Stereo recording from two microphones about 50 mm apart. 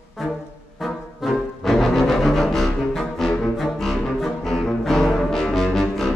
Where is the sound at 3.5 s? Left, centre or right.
Centre.